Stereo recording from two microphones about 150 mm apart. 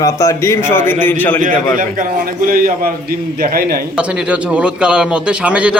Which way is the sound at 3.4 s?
80° right.